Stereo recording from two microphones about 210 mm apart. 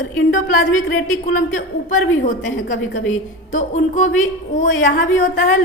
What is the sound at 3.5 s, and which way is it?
A woman's voice, 35° left (ahead or behind).